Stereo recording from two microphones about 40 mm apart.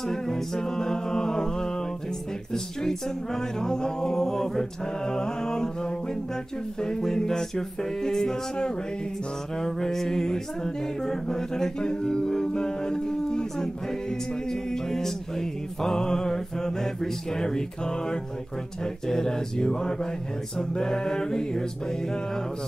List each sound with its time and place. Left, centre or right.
0.1 s a capella: centre